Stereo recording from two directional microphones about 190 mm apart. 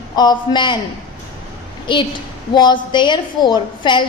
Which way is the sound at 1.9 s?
25° left (ahead or behind).